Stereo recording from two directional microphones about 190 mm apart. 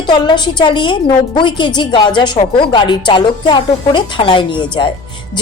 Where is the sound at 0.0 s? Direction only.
25° left (ahead or behind).